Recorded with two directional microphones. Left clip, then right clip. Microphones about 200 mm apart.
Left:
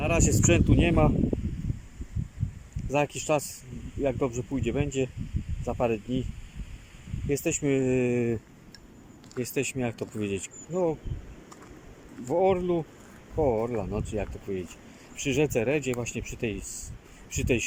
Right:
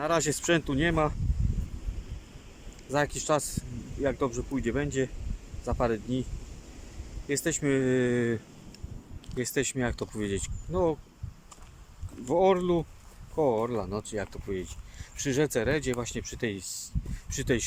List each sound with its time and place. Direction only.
0.0 s speech: 5° left (ahead or behind)
2.9 s speech: 5° left (ahead or behind)
7.3 s speech: 10° left (ahead or behind)
12.3 s speech: centre (ahead or behind)